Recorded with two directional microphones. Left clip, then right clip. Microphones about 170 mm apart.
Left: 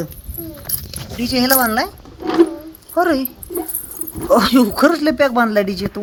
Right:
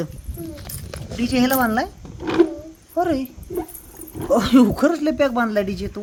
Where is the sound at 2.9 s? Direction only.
5° right (ahead or behind).